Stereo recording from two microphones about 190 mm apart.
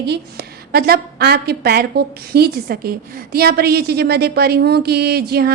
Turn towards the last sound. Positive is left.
turn(degrees=-55)  # may be behind; listen again after turning